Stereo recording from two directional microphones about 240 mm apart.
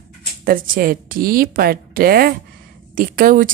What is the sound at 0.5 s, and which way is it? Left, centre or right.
A woman's voice, right.